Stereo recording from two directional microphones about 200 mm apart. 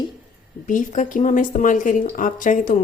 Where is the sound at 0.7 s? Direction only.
40° left (ahead or behind).